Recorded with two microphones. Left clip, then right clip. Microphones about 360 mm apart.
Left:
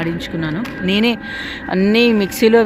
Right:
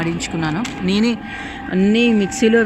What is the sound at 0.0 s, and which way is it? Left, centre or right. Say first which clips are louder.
Speech: even; centre.